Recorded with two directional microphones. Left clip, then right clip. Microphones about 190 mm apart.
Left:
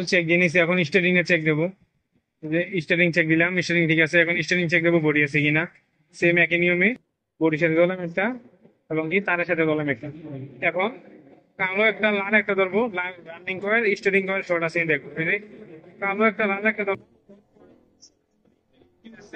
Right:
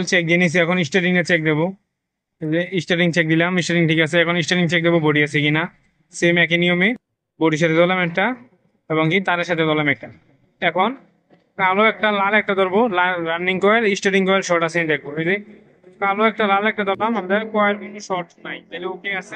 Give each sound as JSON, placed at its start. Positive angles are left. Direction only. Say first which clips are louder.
{"t": 0.0, "sound": "a man's voice", "louder": "right 3 dB", "side_deg": -75}